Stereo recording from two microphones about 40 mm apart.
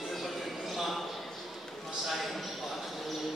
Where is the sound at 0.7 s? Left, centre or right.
Centre.